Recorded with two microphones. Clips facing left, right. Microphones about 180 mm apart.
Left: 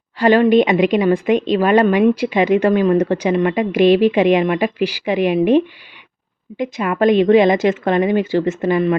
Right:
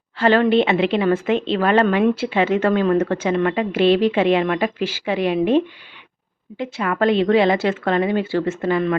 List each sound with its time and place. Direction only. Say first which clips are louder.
0.2 s a woman's voice: left 4 dB; 15° left (ahead or behind)